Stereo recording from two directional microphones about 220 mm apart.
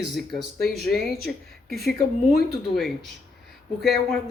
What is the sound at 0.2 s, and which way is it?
Speech, centre (ahead or behind).